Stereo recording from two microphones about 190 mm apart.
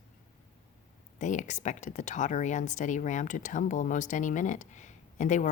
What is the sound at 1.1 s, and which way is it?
Speech, 40° left (ahead or behind).